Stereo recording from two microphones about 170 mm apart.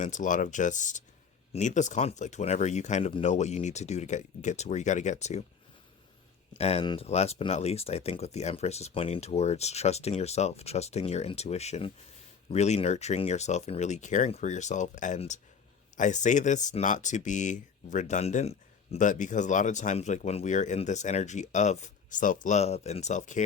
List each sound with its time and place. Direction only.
0.0 s speech: 50° left (ahead or behind)
6.6 s speech: 40° left (ahead or behind)